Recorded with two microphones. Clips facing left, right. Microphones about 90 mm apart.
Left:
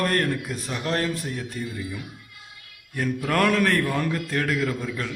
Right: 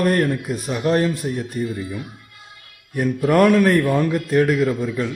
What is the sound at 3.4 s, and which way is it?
A man's voice, 15° right (ahead or behind).